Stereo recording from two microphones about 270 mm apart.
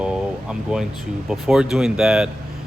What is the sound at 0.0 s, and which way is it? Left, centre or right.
Air conditioning, centre.